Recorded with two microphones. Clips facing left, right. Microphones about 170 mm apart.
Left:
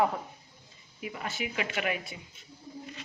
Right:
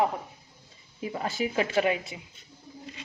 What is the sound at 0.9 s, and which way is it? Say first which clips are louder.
Speech: right 6 dB; 30° right (ahead or behind).